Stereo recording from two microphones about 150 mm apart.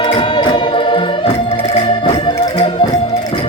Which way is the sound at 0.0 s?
35° left (ahead or behind).